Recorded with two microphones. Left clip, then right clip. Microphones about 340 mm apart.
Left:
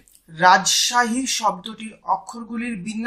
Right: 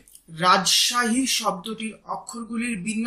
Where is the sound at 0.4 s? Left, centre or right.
Centre.